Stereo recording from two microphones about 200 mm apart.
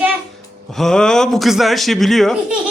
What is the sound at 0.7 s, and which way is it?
A man's voice, centre (ahead or behind).